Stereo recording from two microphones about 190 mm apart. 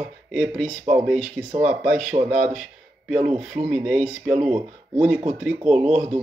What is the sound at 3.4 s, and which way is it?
Speech, centre (ahead or behind).